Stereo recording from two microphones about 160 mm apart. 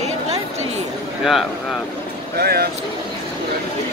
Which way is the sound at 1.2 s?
Centre (ahead or behind).